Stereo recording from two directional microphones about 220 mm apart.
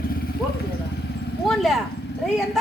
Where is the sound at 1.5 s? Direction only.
Centre (ahead or behind).